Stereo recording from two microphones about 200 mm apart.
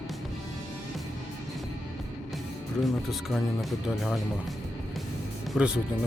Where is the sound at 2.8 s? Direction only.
Centre (ahead or behind).